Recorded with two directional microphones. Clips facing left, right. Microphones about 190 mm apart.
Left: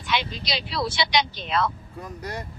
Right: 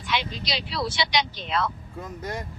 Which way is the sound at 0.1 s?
60° left (ahead or behind).